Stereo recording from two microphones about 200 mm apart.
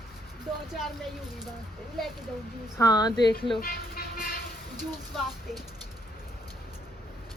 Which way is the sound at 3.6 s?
45° left (ahead or behind).